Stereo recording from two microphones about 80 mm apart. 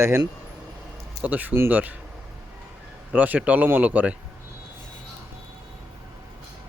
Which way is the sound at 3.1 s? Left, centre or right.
Centre.